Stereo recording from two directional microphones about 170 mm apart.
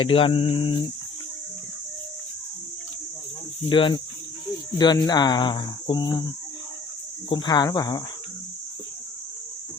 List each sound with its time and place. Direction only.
0.0 s cricket: 30° left (ahead or behind)
3.7 s speech: 30° left (ahead or behind)
7.3 s speech: 25° left (ahead or behind)